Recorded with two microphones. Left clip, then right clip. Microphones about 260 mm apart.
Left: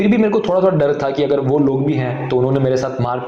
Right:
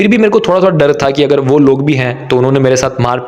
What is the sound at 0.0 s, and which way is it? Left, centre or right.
A man's voice, right.